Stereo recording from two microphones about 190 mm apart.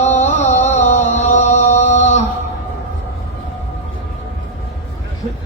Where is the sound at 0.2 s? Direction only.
35° left (ahead or behind).